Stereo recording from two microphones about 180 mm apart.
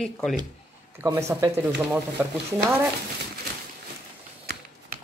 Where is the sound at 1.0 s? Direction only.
15° right (ahead or behind).